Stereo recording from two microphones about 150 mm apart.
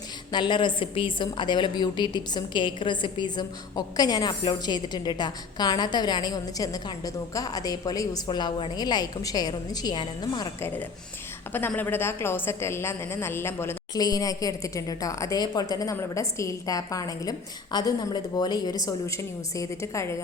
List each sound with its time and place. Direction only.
0.3 s a woman's voice: 30° left (ahead or behind)
11.5 s a woman's voice: 10° left (ahead or behind)